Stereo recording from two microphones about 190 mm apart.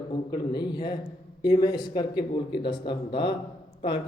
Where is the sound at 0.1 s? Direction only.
25° left (ahead or behind).